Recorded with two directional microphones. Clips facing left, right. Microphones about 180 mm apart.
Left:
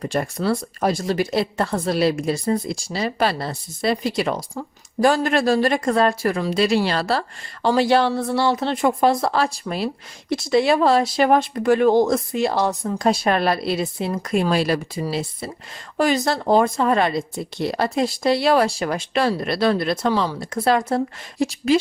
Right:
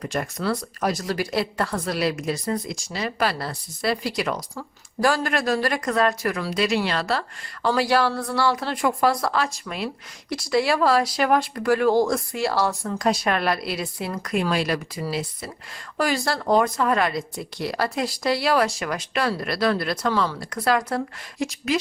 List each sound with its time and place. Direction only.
0.0 s speech: 30° left (ahead or behind)